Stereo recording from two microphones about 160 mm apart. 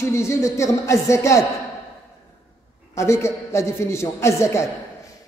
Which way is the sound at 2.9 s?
15° left (ahead or behind).